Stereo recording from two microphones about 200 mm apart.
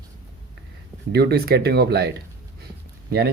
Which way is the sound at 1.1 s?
55° right (ahead or behind).